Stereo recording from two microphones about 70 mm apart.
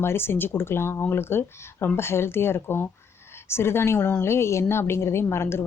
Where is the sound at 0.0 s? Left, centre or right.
Left.